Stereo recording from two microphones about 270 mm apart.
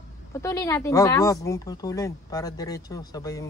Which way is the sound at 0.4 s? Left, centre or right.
Centre.